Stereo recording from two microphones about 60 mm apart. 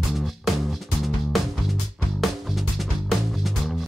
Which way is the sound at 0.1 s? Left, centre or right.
Centre.